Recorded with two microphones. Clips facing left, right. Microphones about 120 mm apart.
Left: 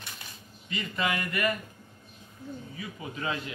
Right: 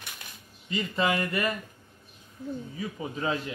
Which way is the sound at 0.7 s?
30° right (ahead or behind).